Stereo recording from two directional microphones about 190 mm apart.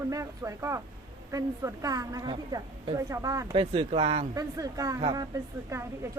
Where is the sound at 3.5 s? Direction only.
30° right (ahead or behind).